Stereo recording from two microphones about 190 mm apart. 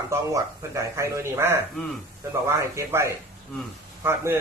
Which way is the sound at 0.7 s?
15° right (ahead or behind).